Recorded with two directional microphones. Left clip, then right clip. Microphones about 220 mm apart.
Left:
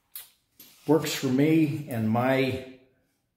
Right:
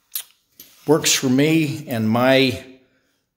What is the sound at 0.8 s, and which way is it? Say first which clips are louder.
Speech: right 7 dB; 45° right (ahead or behind).